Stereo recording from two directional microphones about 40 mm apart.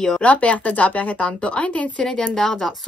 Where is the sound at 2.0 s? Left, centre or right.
Centre.